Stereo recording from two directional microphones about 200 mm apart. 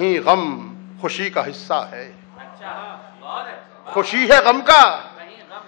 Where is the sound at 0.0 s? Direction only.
15° left (ahead or behind).